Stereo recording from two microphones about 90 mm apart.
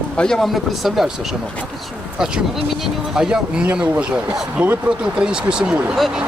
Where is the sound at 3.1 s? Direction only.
10° right (ahead or behind).